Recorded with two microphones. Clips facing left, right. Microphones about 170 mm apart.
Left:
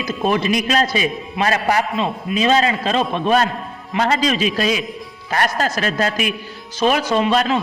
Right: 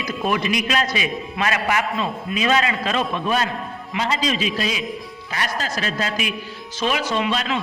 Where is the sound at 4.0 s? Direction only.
55° left (ahead or behind).